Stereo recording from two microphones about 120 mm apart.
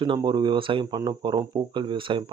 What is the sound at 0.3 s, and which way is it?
Speech, 40° right (ahead or behind).